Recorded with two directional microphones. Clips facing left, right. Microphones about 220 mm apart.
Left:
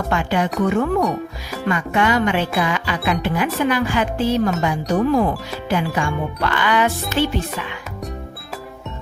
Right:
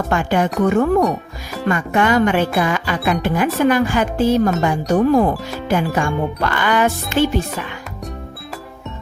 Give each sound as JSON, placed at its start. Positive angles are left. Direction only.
{"t": 0.1, "sound": "music", "side_deg": -45}